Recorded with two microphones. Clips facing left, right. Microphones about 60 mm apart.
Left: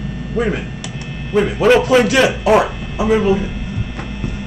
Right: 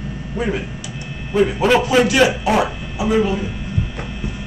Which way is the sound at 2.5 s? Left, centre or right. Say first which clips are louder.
Left 4 dB; left.